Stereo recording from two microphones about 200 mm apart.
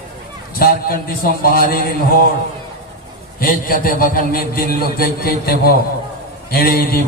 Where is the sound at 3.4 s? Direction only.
45° left (ahead or behind).